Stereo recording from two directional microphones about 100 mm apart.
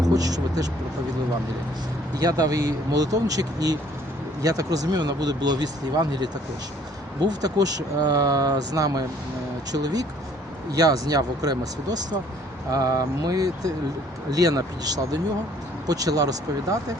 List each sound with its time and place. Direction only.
0.0 s speech: 40° right (ahead or behind)
2.1 s speech: 40° right (ahead or behind)